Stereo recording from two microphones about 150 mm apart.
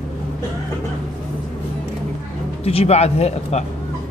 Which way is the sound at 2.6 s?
45° left (ahead or behind).